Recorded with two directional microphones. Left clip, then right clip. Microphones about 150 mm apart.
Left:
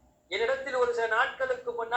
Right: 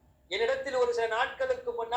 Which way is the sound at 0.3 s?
20° right (ahead or behind).